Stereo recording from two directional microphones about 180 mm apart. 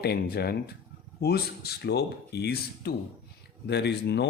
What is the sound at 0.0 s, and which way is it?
Speech, 65° left (ahead or behind).